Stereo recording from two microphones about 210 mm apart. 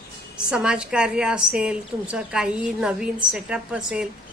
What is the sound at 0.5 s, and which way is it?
A woman's voice, 5° right (ahead or behind).